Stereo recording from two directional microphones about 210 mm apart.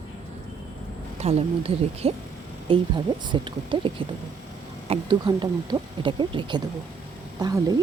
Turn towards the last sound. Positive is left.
turn(degrees=-20)  # may be behind; listen again after turning